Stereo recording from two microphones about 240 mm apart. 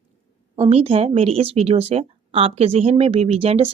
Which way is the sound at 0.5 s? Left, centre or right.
Right.